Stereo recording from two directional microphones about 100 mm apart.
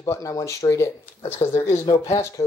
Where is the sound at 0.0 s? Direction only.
30° left (ahead or behind).